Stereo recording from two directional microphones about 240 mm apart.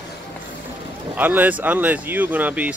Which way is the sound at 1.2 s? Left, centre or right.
Centre.